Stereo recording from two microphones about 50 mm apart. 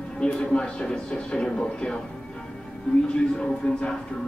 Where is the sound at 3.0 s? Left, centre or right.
Left.